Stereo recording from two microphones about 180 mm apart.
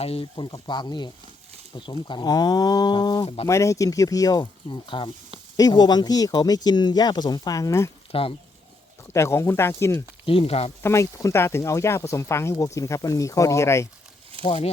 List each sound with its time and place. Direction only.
0.0 s speech: 30° left (ahead or behind)
8.1 s speech: 30° left (ahead or behind)
9.1 s speech: 15° left (ahead or behind)
10.2 s speech: 30° left (ahead or behind)
10.8 s speech: 15° left (ahead or behind)
14.4 s speech: 35° left (ahead or behind)